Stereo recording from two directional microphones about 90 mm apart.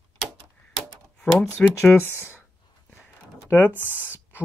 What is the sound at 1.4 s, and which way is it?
Speech, 20° left (ahead or behind).